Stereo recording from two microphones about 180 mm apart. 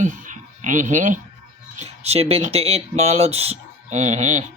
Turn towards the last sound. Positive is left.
turn(degrees=-40)  # may be behind; listen again after turning